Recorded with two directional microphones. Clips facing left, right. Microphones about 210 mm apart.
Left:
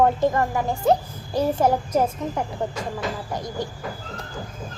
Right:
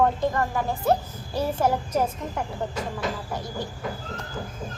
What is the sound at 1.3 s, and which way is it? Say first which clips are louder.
Speech: left 4 dB; 10° left (ahead or behind).